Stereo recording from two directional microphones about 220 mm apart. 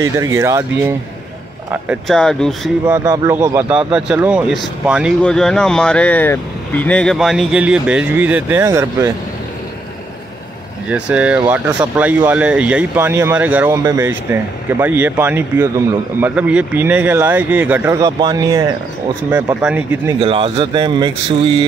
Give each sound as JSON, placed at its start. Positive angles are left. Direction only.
{"t": 0.0, "sound": "speech", "side_deg": -15}
{"t": 1.7, "sound": "speech", "side_deg": -5}
{"t": 3.1, "sound": "speech", "side_deg": -10}
{"t": 10.9, "sound": "speech", "side_deg": -5}
{"t": 20.2, "sound": "speech", "side_deg": -25}